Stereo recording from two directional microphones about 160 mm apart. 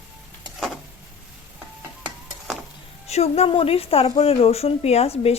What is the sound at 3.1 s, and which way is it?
A woman's voice, 40° left (ahead or behind).